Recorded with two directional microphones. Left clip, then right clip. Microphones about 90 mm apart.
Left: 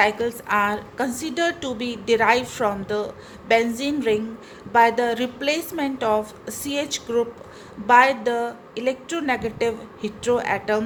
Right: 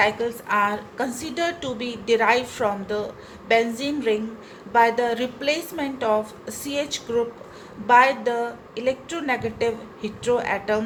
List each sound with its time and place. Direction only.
0.0 s a woman's voice: 55° left (ahead or behind)